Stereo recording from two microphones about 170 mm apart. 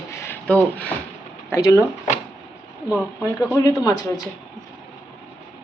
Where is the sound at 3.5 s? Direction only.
20° left (ahead or behind).